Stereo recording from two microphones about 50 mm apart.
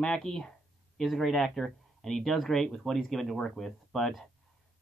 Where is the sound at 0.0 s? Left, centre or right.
Centre.